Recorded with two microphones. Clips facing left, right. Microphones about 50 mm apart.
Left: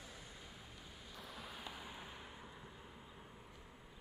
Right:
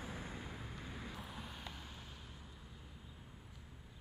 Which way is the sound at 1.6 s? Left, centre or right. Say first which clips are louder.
Left 2 dB; centre.